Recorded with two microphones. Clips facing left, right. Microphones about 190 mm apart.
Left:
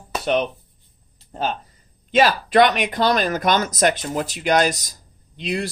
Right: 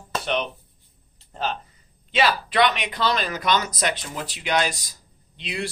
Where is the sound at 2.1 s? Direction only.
45° left (ahead or behind).